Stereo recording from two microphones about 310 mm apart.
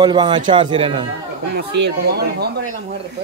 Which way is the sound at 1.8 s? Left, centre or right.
Right.